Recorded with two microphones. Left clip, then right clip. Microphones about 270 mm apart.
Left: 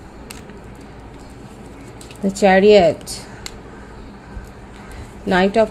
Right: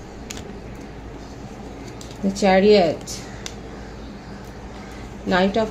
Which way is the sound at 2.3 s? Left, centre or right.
Left.